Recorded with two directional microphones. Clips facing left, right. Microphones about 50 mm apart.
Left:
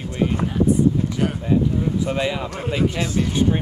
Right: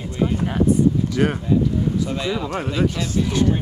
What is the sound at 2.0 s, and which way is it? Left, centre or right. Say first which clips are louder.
Speech: left 1 dB; left.